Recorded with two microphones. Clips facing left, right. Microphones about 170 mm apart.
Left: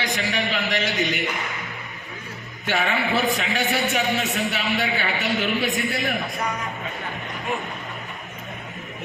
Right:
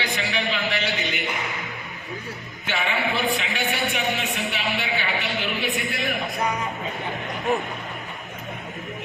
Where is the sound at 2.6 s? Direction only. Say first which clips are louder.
Left 2 dB; 40° left (ahead or behind).